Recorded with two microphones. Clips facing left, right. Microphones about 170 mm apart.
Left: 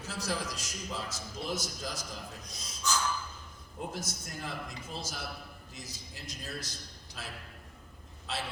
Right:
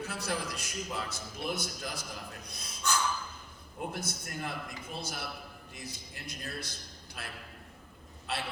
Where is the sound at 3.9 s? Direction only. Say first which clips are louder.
Right 2 dB; 60° right (ahead or behind).